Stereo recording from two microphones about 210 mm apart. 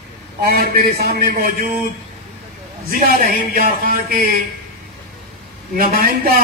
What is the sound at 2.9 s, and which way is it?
A man's voice, 45° right (ahead or behind).